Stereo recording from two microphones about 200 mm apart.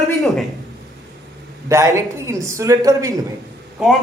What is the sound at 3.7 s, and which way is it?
Speech, centre (ahead or behind).